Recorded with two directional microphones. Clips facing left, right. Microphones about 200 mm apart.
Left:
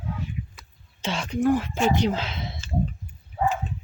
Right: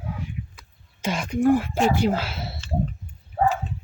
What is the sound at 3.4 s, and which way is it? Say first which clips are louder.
Dog: right 3 dB; 60° right (ahead or behind).